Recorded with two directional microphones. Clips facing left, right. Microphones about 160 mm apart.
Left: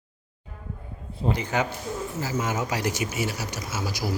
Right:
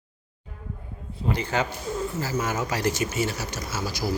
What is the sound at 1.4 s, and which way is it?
Speech, 15° left (ahead or behind).